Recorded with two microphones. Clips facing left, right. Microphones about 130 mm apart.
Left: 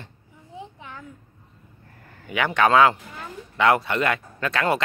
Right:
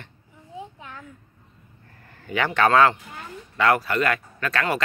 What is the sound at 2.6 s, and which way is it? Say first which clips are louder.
Speech: left 1 dB; 15° left (ahead or behind).